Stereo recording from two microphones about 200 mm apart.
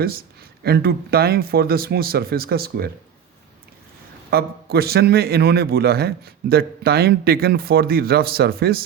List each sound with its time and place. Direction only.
0.0 s a man's voice: 50° right (ahead or behind)
4.3 s a man's voice: 50° right (ahead or behind)